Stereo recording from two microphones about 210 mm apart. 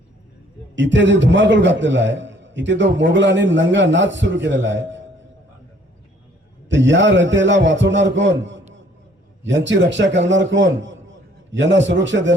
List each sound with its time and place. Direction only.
0.8 s a man's voice: 60° right (ahead or behind)
6.7 s a man's voice: 60° right (ahead or behind)